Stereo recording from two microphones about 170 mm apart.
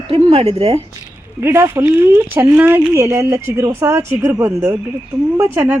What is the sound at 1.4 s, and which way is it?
Speech, 15° right (ahead or behind).